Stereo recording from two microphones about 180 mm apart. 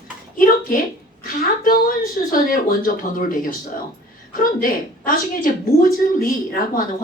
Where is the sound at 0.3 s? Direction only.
50° left (ahead or behind).